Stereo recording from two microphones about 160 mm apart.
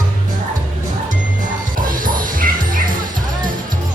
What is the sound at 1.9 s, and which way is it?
Music, 60° right (ahead or behind).